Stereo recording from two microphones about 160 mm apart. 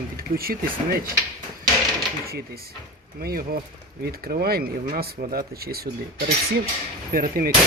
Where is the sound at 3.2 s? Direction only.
70° right (ahead or behind).